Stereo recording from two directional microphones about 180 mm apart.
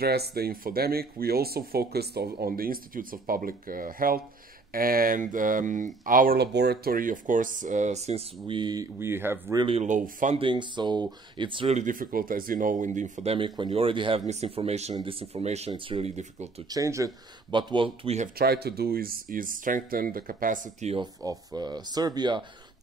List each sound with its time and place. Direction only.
0.0 s speech: 60° right (ahead or behind); by 9.6 s 15° right (ahead or behind)
9.6 s speech: 35° right (ahead or behind)
10.4 s speech: 25° right (ahead or behind)
11.8 s speech: 50° right (ahead or behind)
16.6 s speech: 20° right (ahead or behind); by 18.3 s 35° right (ahead or behind)
18.4 s speech: 60° right (ahead or behind); by 20.9 s 45° right (ahead or behind)
20.9 s speech: 20° right (ahead or behind)